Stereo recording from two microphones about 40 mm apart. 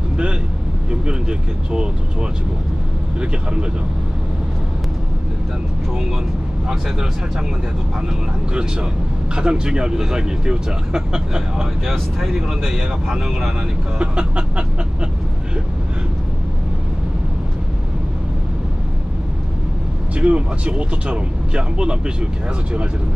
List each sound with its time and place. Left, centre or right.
9.3 s speech: right
11.9 s speech: centre
13.9 s speech: right
20.2 s speech: right